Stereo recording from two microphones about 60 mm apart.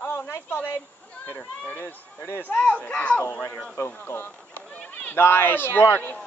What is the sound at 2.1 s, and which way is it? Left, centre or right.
Speech, left.